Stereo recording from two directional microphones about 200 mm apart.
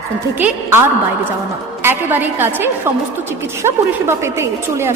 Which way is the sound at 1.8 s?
10° right (ahead or behind).